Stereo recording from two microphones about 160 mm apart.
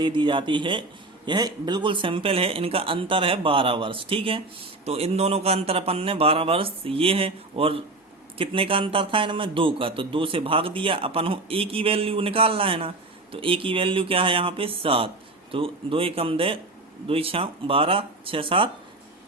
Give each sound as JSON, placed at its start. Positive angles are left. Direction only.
{"t": 0.0, "sound": "speech", "side_deg": -30}